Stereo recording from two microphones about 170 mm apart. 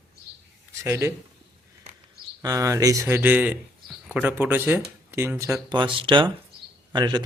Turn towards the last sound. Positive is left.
turn(degrees=-25)  # may be behind; listen again after turning